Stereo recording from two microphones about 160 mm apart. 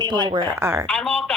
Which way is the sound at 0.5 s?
15° right (ahead or behind).